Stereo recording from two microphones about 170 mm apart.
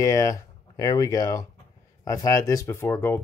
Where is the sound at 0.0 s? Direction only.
20° left (ahead or behind).